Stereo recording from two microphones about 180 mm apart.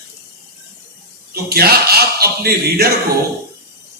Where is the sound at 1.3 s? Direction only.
60° right (ahead or behind).